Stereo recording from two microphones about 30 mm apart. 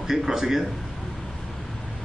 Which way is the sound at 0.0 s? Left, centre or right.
Centre.